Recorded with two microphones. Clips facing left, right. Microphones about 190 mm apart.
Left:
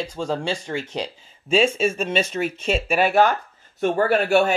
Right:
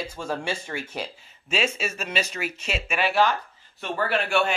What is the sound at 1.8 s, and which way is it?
Speech, 30° left (ahead or behind).